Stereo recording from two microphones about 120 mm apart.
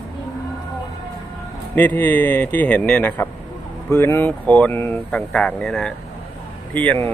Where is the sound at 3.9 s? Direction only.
20° left (ahead or behind).